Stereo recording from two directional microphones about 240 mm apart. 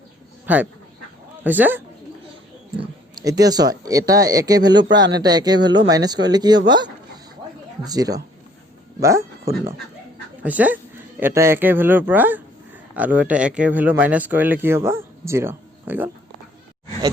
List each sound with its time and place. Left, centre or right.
0.4 s speech: centre
2.7 s speech: centre
10.4 s speech: centre